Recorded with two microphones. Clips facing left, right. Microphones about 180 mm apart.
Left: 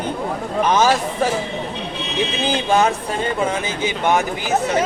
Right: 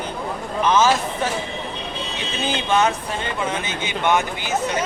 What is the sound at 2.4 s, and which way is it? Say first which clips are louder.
Speech: left 2 dB; 35° left (ahead or behind).